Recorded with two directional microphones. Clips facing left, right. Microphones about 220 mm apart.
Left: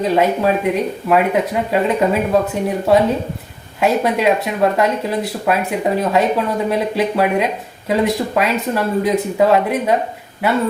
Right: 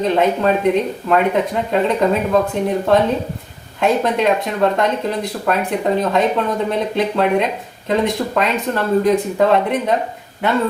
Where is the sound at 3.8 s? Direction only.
5° left (ahead or behind).